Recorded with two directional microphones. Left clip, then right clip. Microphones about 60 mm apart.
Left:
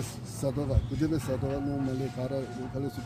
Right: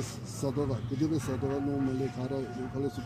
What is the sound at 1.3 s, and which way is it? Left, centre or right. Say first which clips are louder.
Speech: even; centre.